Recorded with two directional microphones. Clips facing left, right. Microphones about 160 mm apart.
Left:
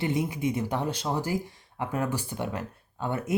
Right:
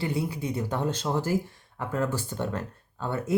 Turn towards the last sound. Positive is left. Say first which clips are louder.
# even
turn(degrees=15)  # may be behind; listen again after turning